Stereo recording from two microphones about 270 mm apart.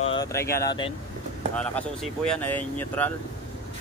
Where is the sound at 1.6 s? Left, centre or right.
Centre.